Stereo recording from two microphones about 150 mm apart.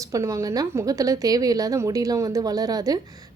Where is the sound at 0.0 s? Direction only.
20° right (ahead or behind).